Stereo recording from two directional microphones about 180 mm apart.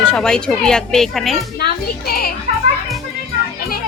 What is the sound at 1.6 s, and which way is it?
Speech, 60° left (ahead or behind).